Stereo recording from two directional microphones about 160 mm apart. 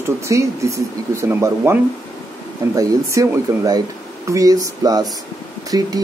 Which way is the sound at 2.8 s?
20° right (ahead or behind).